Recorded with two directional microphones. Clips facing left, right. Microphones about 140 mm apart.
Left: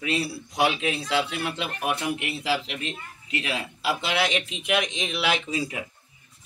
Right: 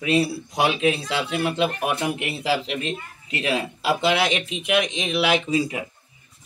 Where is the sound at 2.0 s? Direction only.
25° right (ahead or behind).